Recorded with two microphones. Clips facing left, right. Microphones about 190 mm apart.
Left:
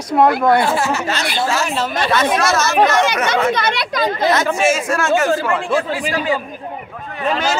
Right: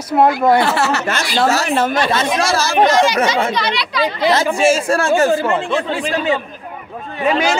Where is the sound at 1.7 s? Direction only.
55° right (ahead or behind).